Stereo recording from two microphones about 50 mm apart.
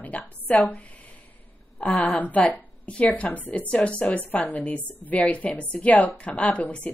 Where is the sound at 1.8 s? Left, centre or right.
Left.